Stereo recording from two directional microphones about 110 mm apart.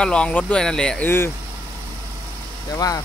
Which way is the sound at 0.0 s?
10° left (ahead or behind).